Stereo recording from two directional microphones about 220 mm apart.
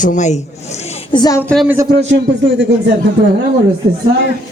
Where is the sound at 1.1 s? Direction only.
20° left (ahead or behind).